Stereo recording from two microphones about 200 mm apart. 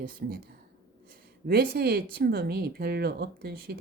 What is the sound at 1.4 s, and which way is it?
Speech, 50° right (ahead or behind).